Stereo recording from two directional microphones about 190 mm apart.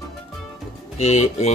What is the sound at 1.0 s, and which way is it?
Speech, 35° left (ahead or behind).